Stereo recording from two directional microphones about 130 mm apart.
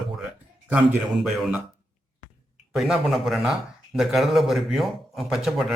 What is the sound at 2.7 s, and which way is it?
A man's voice, 5° right (ahead or behind).